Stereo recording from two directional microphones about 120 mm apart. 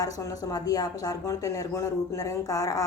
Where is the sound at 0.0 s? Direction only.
30° left (ahead or behind).